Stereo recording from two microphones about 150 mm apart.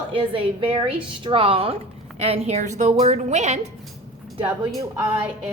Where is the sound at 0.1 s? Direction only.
35° right (ahead or behind).